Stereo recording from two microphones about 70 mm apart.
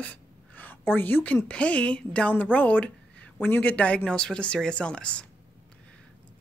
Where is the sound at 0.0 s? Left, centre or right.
Left.